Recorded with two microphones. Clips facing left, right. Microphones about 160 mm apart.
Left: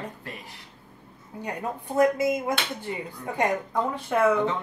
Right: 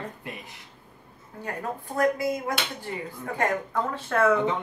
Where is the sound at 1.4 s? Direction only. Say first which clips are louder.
Left 1 dB; 15° left (ahead or behind).